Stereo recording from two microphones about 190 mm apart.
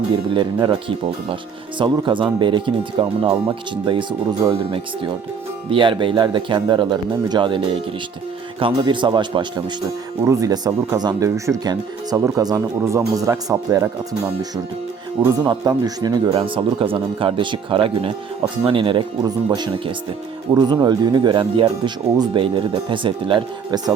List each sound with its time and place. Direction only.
0.3 s speech: 25° right (ahead or behind)
15.4 s speech: 20° right (ahead or behind)